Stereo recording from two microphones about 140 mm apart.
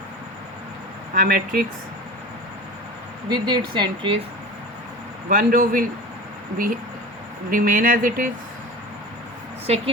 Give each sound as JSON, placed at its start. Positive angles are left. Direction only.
{"t": 1.1, "sound": "speech", "side_deg": -90}
{"t": 3.2, "sound": "a woman's voice", "side_deg": -30}
{"t": 5.3, "sound": "speech", "side_deg": -85}
{"t": 7.5, "sound": "speech", "side_deg": -85}
{"t": 9.6, "sound": "a woman's voice", "side_deg": -45}